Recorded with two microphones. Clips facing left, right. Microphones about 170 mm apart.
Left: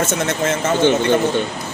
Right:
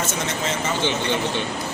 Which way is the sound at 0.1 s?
55° left (ahead or behind).